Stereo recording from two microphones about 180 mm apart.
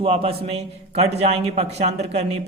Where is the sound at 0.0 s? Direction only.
30° right (ahead or behind).